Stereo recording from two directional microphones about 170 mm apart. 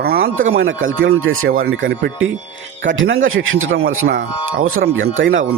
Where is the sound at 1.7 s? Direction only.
90° right.